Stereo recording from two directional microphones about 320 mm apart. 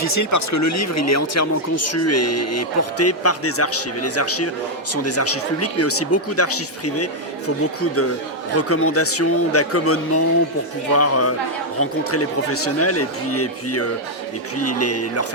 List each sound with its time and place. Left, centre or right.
0.0 s speech: left